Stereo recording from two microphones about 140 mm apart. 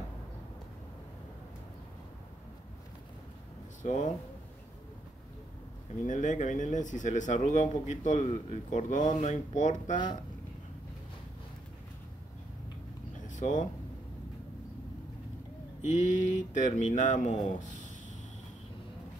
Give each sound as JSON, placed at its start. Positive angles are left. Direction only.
{"t": 3.8, "sound": "speech", "side_deg": 60}
{"t": 6.0, "sound": "speech", "side_deg": 60}
{"t": 13.3, "sound": "speech", "side_deg": 60}
{"t": 15.8, "sound": "speech", "side_deg": 60}